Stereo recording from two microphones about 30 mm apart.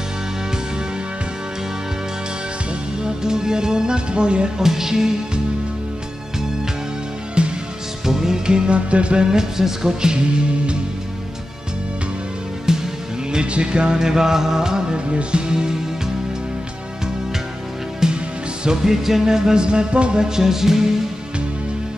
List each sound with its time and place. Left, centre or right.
3.0 s music: right
4.6 s music: centre
7.4 s music: right
8.0 s music: centre
8.5 s music: right
8.7 s music: right
9.2 s music: centre
12.6 s music: centre
13.4 s music: right
15.0 s music: right
15.4 s music: right
18.1 s music: right
18.9 s music: centre; by 20.2 s right
20.2 s music: centre